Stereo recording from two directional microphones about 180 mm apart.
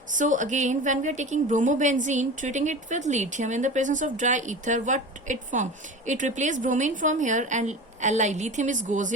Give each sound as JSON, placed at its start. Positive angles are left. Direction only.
{"t": 0.2, "sound": "a woman's voice", "side_deg": -45}